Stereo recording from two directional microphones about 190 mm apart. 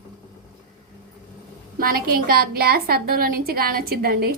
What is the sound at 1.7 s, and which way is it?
A woman's voice, 50° right (ahead or behind).